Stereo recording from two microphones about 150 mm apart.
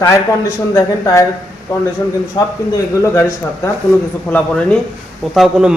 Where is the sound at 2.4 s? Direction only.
25° left (ahead or behind).